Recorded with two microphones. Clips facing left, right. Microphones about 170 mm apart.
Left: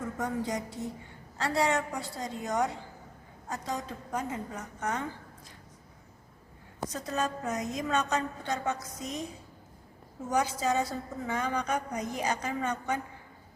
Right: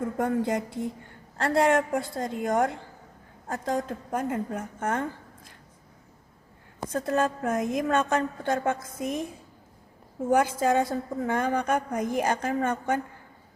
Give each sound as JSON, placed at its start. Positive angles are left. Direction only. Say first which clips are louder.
{"t": 0.2, "sound": "a woman's voice", "louder": "right 7 dB", "side_deg": -55}
{"t": 6.8, "sound": "a woman's voice", "louder": "right 6 dB", "side_deg": -55}